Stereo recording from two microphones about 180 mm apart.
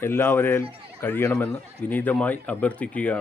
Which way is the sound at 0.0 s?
10° left (ahead or behind).